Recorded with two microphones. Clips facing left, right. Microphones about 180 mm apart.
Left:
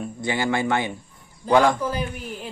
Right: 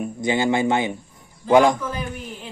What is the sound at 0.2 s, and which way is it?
Speech, 20° right (ahead or behind).